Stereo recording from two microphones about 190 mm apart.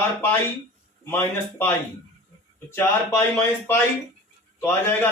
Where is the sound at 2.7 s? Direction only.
10° left (ahead or behind).